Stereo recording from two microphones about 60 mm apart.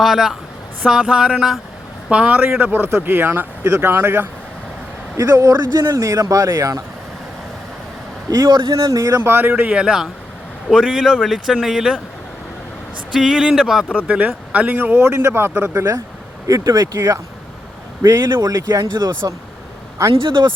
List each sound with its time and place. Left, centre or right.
0.0 s speech: centre
2.7 s speech: right
5.2 s speech: right
5.9 s speech: right
8.3 s speech: right
9.3 s speech: right
9.7 s speech: centre
13.1 s speech: centre
13.9 s speech: right
14.9 s speech: right
16.5 s speech: right
18.4 s speech: right
20.0 s speech: right